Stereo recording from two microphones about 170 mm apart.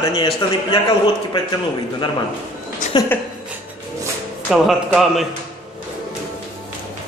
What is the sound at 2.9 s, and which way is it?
Speech, 25° left (ahead or behind).